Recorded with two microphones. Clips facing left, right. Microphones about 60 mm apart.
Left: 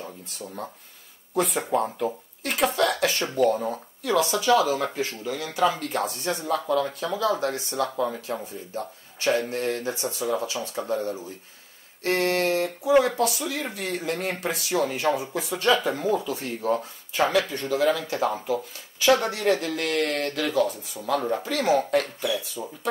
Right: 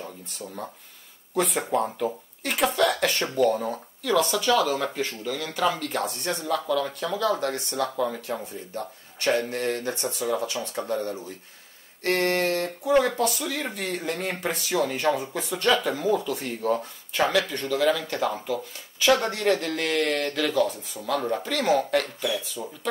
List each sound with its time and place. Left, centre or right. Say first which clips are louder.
0.0 s speech: even; centre
17.2 s speech: left 1 dB; centre